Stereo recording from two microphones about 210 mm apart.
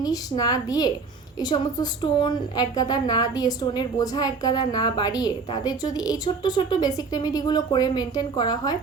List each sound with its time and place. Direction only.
0.0 s a woman's voice: 20° left (ahead or behind)